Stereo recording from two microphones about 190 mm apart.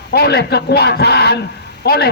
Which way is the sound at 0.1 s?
55° left (ahead or behind).